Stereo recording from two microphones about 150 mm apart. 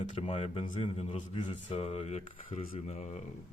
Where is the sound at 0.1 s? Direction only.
40° left (ahead or behind).